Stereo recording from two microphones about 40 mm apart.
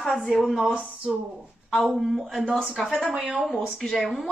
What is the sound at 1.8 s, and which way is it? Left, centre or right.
Speech, centre.